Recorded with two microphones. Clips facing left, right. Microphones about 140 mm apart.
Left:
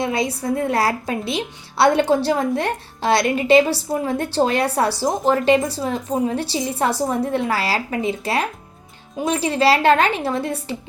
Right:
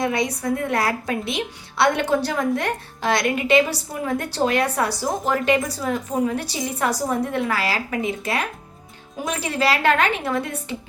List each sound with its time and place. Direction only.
0.0 s a woman's voice: 30° left (ahead or behind)